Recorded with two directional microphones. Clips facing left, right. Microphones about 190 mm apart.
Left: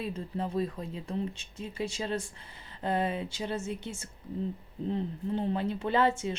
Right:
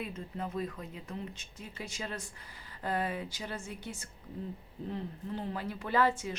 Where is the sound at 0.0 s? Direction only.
30° left (ahead or behind).